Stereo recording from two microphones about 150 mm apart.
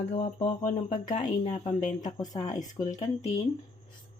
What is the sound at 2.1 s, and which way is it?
Speech, 25° left (ahead or behind).